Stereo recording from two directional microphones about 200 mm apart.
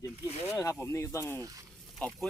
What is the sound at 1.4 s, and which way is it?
Speech, 15° right (ahead or behind).